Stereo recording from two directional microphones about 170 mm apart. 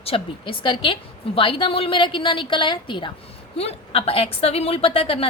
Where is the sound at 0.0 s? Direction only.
30° left (ahead or behind).